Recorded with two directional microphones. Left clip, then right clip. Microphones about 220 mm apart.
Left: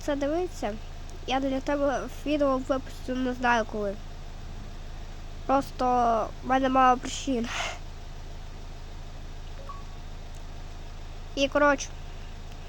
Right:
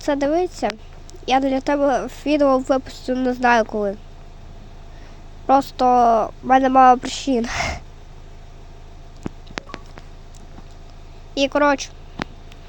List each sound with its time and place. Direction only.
0.0 s speech: 20° right (ahead or behind)
5.5 s speech: 15° right (ahead or behind)
11.3 s speech: 15° right (ahead or behind)